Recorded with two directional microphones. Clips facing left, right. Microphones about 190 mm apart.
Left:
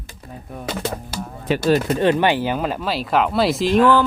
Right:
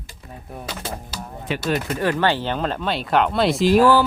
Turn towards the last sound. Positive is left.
turn(degrees=-5)  # may be behind; listen again after turning